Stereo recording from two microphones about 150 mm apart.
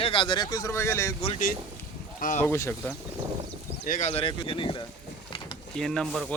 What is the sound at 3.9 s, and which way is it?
Speech, 55° left (ahead or behind).